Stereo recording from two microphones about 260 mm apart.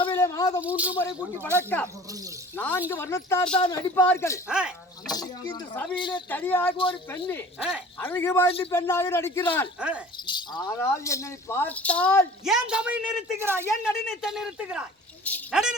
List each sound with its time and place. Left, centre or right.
0.0 s a sound: centre
0.6 s speech: centre
0.9 s speech: centre
2.6 s speech: centre
4.4 s speech: centre
5.1 s speech: centre
6.3 s speech: centre
8.4 s a man's voice: left
8.7 s speech: centre
9.8 s speech: centre
10.2 s speech: centre
12.5 s speech: centre
15.2 s a sound: centre